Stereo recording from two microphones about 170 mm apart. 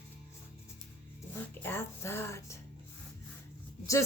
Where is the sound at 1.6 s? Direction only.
15° left (ahead or behind).